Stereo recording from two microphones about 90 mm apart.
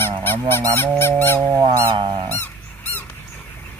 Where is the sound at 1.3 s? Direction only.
50° right (ahead or behind).